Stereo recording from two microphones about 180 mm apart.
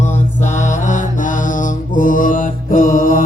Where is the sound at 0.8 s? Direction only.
45° left (ahead or behind).